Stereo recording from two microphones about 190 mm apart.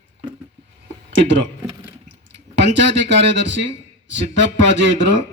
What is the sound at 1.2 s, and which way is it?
Speech, 70° right (ahead or behind).